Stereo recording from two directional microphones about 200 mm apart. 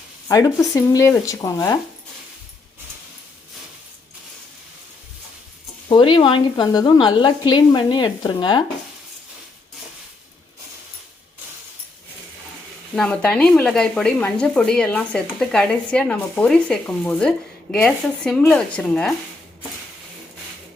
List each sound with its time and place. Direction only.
0.3 s speech: 15° left (ahead or behind)
5.9 s a woman's voice: 25° left (ahead or behind)
13.0 s speech: 5° left (ahead or behind)